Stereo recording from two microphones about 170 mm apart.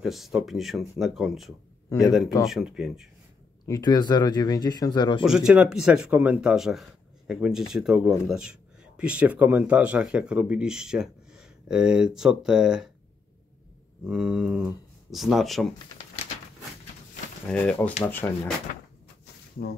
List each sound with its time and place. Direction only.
0.0 s speech: centre (ahead or behind)
3.6 s speech: 20° left (ahead or behind)
5.2 s speech: 5° right (ahead or behind)
14.0 s speech: 5° right (ahead or behind)
17.5 s speech: 10° left (ahead or behind)
19.6 s speech: 70° left (ahead or behind)